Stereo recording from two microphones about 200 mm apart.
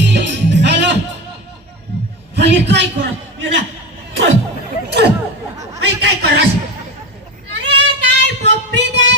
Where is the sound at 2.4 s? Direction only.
60° right (ahead or behind).